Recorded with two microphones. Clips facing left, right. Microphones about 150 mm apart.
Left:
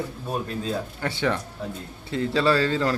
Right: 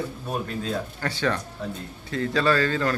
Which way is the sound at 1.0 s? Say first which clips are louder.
Left 1 dB; 20° left (ahead or behind).